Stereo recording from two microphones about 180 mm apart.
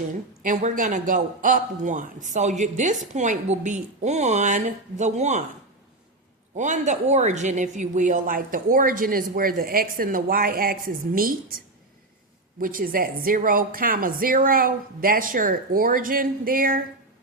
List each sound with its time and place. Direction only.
0.4 s a woman's voice: 45° right (ahead or behind)
6.6 s a woman's voice: 40° right (ahead or behind)